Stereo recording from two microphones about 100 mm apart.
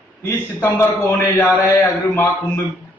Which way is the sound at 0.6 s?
20° left (ahead or behind).